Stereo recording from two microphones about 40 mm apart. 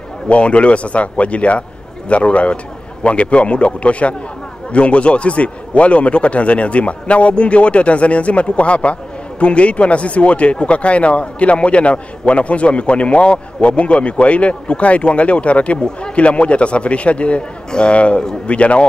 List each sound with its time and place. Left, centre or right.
0.3 s a man's voice: left